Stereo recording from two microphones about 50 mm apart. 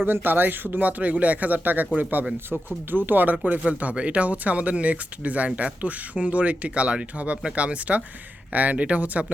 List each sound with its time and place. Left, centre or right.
0.0 s speech: right
2.5 s speech: right
2.9 s speech: right